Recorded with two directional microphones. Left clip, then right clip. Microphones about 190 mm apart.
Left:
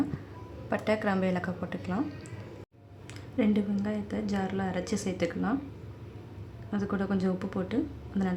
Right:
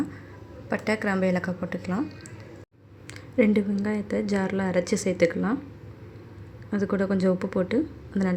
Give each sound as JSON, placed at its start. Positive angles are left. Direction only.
{"t": 0.7, "sound": "speech", "side_deg": -15}
{"t": 3.3, "sound": "a woman's voice", "side_deg": -25}
{"t": 6.7, "sound": "a woman's voice", "side_deg": -20}